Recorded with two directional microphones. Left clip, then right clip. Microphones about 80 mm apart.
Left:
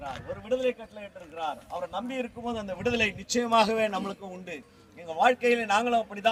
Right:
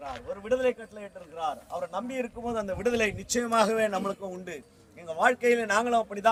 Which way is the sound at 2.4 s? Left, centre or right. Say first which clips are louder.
Right 3 dB; right.